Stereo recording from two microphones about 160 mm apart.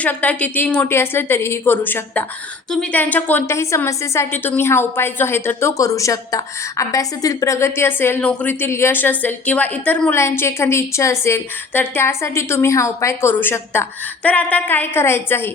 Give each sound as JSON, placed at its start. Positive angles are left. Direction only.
{"t": 0.0, "sound": "a woman's voice", "side_deg": 10}